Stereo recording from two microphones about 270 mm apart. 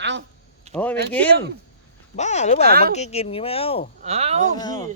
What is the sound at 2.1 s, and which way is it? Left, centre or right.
Speech, left.